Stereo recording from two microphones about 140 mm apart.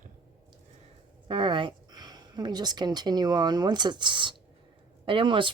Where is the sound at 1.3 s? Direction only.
35° right (ahead or behind).